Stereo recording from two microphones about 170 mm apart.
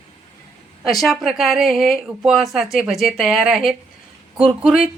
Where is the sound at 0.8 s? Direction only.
Centre (ahead or behind).